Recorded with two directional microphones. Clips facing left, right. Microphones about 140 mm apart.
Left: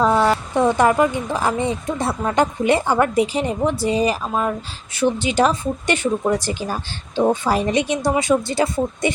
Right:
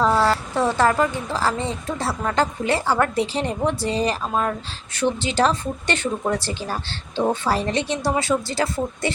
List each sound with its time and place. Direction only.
0.0 s speech: 20° left (ahead or behind)